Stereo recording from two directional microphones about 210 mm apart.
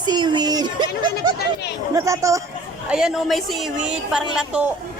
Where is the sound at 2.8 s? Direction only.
5° right (ahead or behind).